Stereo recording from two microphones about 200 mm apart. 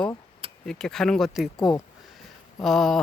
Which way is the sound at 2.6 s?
Centre (ahead or behind).